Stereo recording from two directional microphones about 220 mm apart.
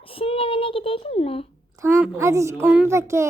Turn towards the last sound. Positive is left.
turn(degrees=-15)  # may be behind; listen again after turning